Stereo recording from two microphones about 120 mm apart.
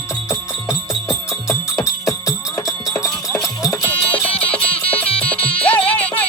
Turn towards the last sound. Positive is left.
turn(degrees=15)  # may be behind; listen again after turning